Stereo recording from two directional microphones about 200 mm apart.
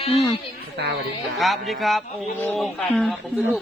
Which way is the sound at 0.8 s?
55° right (ahead or behind).